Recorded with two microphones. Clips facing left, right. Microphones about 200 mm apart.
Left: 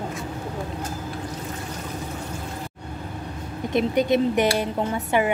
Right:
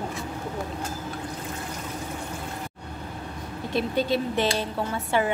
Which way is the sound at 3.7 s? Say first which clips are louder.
Left 5 dB; 20° left (ahead or behind).